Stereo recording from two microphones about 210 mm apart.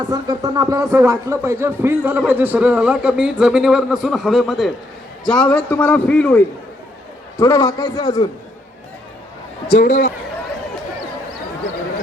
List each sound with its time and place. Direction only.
0.0 s a man's voice: 20° right (ahead or behind); by 8.3 s 20° left (ahead or behind)
9.7 s a man's voice: 45° left (ahead or behind)